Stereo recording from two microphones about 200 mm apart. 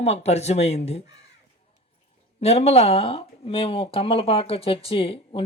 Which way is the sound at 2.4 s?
30° left (ahead or behind).